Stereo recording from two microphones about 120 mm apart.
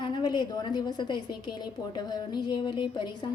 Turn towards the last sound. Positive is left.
turn(degrees=40)  # may be behind; listen again after turning